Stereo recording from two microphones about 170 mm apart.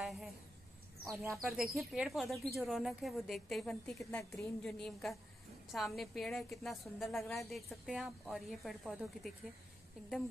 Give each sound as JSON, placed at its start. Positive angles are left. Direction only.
{"t": 0.0, "sound": "a sound", "side_deg": 0}
{"t": 1.3, "sound": "a woman's voice", "side_deg": 0}
{"t": 4.0, "sound": "a woman's voice", "side_deg": 15}
{"t": 4.6, "sound": "a woman's voice", "side_deg": 0}